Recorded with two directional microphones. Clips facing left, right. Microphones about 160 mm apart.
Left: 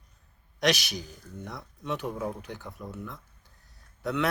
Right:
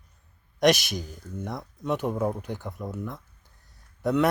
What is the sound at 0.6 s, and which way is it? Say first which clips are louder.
A man's voice: right 6 dB; 50° right (ahead or behind).